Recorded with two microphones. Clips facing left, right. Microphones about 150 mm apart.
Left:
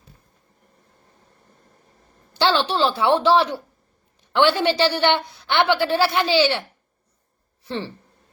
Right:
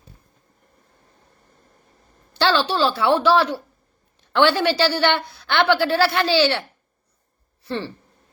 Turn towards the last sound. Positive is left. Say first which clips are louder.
# right 1 dB
turn(degrees=20)  # may be behind; listen again after turning